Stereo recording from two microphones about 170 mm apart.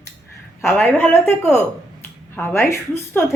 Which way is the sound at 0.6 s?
15° left (ahead or behind).